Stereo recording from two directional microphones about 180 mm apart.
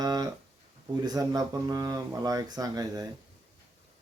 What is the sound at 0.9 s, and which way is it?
Speech, 20° right (ahead or behind).